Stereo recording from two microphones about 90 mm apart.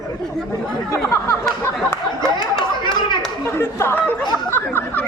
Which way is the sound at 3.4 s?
25° left (ahead or behind).